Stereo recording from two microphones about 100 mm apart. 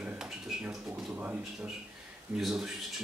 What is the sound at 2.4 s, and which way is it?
Speech, 5° right (ahead or behind).